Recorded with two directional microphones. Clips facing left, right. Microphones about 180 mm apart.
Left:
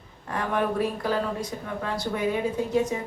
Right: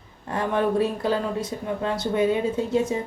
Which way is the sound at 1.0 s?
25° right (ahead or behind).